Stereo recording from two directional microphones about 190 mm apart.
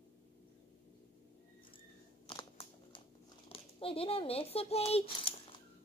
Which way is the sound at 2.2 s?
25° left (ahead or behind).